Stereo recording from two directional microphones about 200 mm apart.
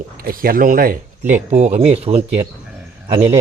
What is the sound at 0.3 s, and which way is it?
Speech, 45° right (ahead or behind).